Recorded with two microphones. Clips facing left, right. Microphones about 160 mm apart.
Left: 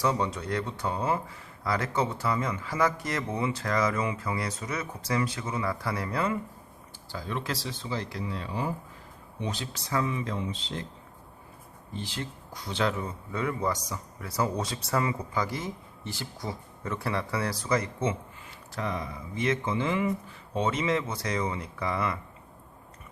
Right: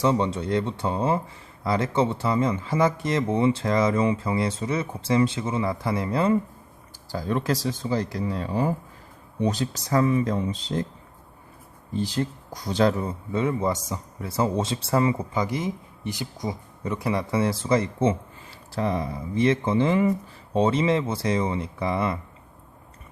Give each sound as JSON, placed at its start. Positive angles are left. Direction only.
{"t": 0.0, "sound": "speech", "side_deg": -25}
{"t": 7.1, "sound": "speech", "side_deg": -40}
{"t": 11.9, "sound": "speech", "side_deg": -40}
{"t": 13.3, "sound": "speech", "side_deg": -25}